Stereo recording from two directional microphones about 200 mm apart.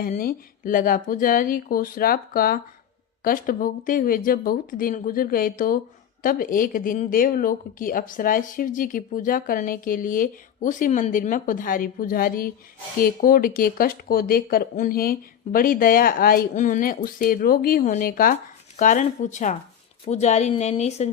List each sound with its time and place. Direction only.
0.0 s a woman's voice: 45° left (ahead or behind)